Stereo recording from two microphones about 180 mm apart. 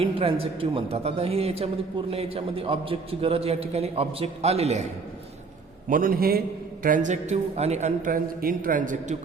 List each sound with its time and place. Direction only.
0.0 s speech: 30° right (ahead or behind)
5.9 s a man's voice: 50° right (ahead or behind)
6.8 s a man's voice: 45° right (ahead or behind)